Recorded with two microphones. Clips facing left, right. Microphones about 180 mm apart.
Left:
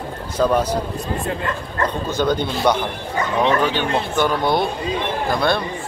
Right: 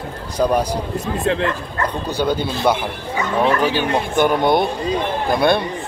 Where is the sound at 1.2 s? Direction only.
90° right.